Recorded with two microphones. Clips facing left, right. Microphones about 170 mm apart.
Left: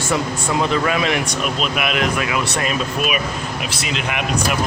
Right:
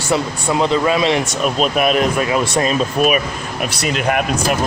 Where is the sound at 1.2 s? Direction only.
40° right (ahead or behind).